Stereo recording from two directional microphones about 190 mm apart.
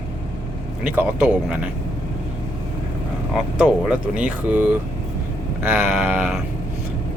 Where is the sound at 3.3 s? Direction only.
5° right (ahead or behind).